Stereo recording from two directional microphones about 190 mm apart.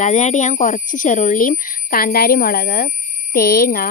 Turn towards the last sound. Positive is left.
turn(degrees=50)  # may be behind; listen again after turning